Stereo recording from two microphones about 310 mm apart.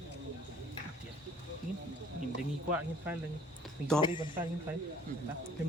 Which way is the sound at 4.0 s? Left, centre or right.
Centre.